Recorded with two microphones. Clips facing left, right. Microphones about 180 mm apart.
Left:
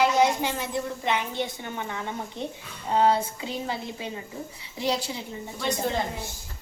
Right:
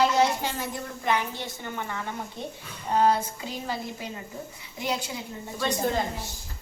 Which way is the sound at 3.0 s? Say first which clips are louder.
Left 1 dB; 25° left (ahead or behind).